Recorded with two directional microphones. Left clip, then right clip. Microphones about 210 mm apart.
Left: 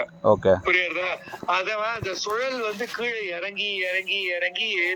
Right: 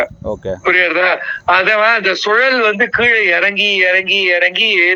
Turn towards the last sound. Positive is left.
turn(degrees=-40)  # may be behind; listen again after turning